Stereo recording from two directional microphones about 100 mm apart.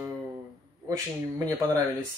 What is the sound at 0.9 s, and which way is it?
Speech, 35° right (ahead or behind).